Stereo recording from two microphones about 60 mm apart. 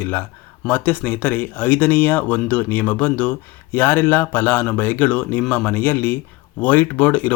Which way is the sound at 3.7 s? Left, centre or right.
Left.